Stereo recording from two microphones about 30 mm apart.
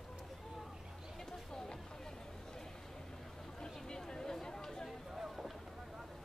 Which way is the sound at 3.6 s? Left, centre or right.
Left.